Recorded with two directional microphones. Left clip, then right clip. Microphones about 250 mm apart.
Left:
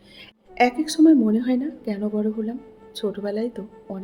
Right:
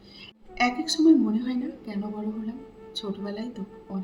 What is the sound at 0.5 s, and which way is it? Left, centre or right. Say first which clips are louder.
Speech: left 5 dB; left.